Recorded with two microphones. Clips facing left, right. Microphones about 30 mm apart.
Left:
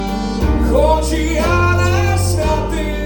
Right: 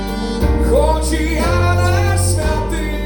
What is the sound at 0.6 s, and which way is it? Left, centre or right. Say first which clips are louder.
Music: left 2 dB; right.